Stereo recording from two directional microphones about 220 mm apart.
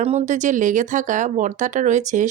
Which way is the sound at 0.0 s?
30° right (ahead or behind).